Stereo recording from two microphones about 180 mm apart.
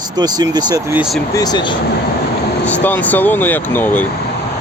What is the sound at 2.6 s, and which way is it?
Speech, 10° left (ahead or behind).